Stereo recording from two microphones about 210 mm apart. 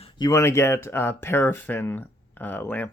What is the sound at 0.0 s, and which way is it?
Speech, 20° left (ahead or behind).